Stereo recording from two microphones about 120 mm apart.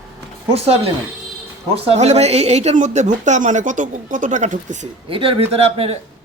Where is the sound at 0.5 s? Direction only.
55° right (ahead or behind); by 4.9 s 90° right.